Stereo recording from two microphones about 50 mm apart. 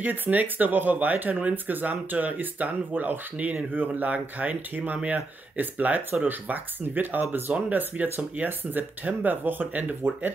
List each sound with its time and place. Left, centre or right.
0.0 s speech: right